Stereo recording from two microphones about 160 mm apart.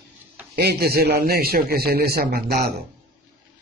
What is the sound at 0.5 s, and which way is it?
A man's voice, 85° right.